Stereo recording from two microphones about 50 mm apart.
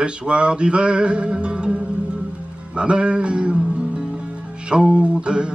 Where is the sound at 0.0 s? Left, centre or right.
Right.